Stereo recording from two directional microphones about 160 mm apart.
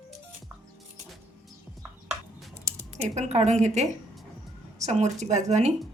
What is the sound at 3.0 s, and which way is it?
A woman's voice, 45° right (ahead or behind).